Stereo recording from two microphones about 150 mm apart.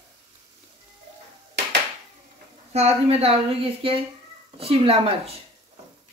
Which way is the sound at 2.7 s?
45° right (ahead or behind).